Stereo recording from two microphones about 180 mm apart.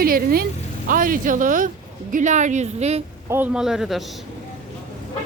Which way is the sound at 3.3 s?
5° right (ahead or behind).